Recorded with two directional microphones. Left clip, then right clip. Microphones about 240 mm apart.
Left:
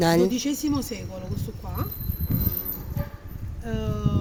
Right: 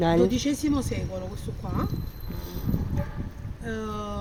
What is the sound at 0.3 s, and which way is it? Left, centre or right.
Speech, left.